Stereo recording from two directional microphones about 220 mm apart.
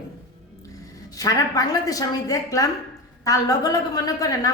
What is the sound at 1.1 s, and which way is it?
A woman's voice, 15° left (ahead or behind).